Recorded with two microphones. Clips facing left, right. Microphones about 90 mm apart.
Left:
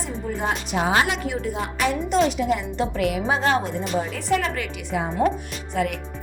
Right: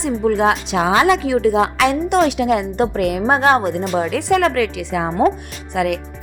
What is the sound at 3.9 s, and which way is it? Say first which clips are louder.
Speech: right 6 dB; 80° right.